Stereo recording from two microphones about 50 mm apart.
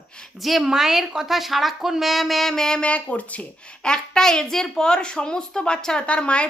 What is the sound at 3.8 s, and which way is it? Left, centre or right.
A woman's voice, centre.